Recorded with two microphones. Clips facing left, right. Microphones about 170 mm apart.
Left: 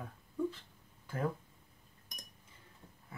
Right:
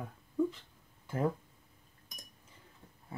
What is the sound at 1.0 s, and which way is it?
Speech, 25° right (ahead or behind).